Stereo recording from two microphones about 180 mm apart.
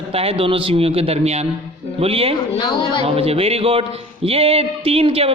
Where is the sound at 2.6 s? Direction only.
25° left (ahead or behind).